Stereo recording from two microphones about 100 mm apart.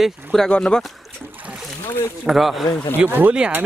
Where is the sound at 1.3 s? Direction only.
15° right (ahead or behind).